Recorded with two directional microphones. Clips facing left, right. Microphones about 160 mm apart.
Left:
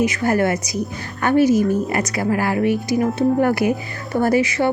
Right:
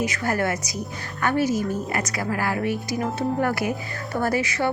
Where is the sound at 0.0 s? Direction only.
20° left (ahead or behind).